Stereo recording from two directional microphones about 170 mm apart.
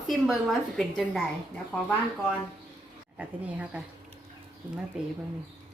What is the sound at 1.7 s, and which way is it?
Speech, 15° left (ahead or behind).